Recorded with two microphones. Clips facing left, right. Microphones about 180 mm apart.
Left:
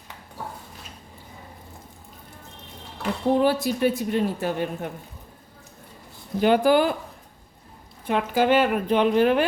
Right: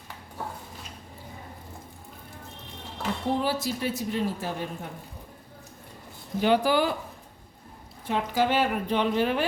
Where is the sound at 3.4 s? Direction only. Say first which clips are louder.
Left 7 dB; 55° left (ahead or behind).